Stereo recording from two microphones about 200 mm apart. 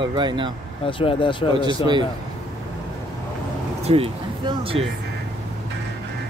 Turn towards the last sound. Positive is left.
turn(degrees=-25)  # may be behind; listen again after turning